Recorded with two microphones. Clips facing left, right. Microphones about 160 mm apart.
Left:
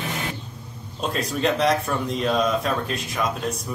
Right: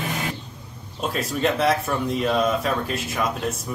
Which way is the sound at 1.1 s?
Centre (ahead or behind).